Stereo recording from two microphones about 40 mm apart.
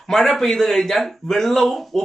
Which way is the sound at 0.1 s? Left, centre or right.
Centre.